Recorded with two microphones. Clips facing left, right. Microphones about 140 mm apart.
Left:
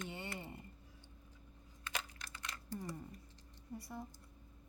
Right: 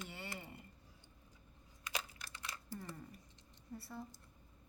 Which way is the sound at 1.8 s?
10° right (ahead or behind).